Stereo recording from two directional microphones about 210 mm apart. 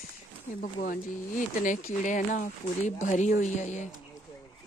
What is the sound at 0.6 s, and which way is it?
Speech, 40° left (ahead or behind).